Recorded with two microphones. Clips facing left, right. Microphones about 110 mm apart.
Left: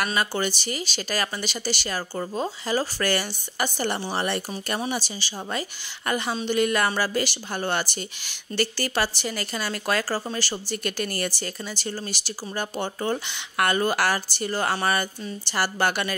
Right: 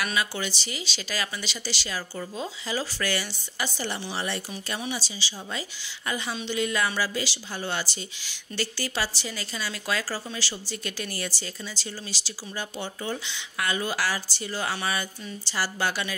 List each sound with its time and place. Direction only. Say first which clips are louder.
0.0 s speech: left 4 dB; 45° left (ahead or behind)